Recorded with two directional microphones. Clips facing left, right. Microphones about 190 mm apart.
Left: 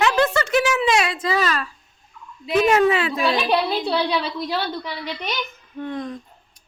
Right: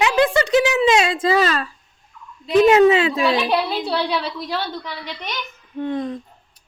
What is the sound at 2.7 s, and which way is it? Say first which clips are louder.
Speech: right 4 dB; 25° right (ahead or behind).